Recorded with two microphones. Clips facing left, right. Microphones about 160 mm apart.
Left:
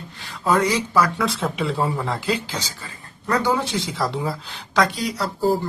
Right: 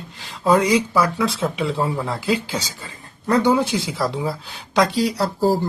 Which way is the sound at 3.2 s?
25° right (ahead or behind).